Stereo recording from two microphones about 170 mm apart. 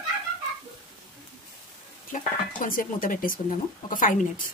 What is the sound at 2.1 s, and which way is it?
Stir, 55° left (ahead or behind).